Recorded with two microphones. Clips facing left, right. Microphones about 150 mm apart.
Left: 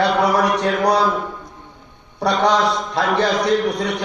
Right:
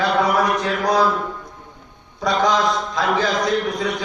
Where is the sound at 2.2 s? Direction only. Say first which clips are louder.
Left 2 dB; 70° left (ahead or behind).